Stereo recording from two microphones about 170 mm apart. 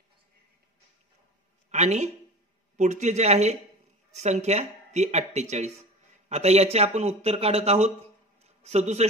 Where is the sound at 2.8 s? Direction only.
45° right (ahead or behind).